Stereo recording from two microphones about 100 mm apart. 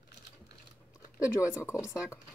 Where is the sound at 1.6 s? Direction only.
25° left (ahead or behind).